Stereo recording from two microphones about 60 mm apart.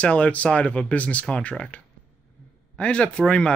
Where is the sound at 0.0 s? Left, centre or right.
Left.